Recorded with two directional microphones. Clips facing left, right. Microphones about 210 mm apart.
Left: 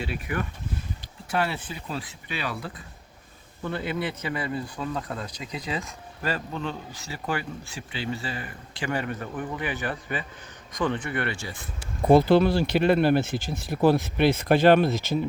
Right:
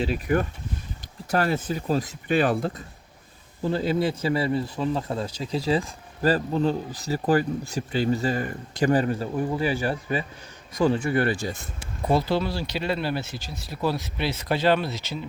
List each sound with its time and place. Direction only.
0.0 s speech: 40° right (ahead or behind)
3.6 s a man's voice: 35° right (ahead or behind)
12.0 s speech: 55° left (ahead or behind)